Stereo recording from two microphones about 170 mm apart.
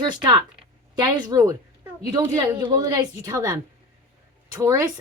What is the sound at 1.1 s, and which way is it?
A woman's voice, 20° right (ahead or behind).